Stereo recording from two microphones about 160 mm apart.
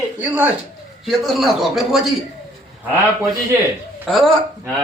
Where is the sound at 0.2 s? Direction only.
10° right (ahead or behind).